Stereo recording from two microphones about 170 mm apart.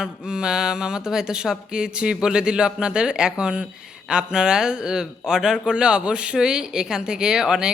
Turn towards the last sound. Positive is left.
turn(degrees=-5)  # may be behind; listen again after turning